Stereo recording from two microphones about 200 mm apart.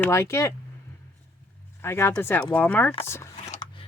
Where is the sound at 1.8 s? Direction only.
10° left (ahead or behind).